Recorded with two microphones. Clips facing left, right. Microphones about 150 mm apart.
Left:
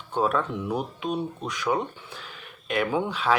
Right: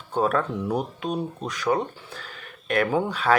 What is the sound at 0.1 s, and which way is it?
Speech, 50° right (ahead or behind).